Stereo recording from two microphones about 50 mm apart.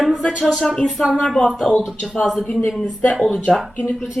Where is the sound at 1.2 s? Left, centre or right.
Centre.